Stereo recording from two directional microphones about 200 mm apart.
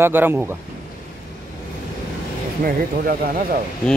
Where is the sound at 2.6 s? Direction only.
50° right (ahead or behind).